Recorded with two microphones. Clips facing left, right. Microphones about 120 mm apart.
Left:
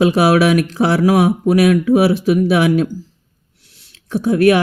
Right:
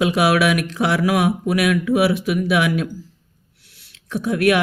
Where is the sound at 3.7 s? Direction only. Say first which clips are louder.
Left 5 dB; 30° left (ahead or behind).